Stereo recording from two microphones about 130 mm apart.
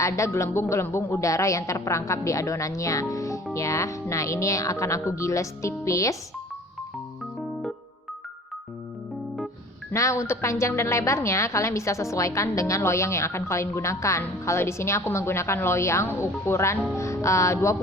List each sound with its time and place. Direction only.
0.0 s a woman's voice: 25° left (ahead or behind)
9.9 s a woman's voice: 20° left (ahead or behind)